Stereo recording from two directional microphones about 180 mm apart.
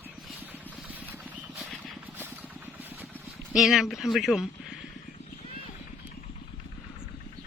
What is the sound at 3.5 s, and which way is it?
Speech, centre (ahead or behind).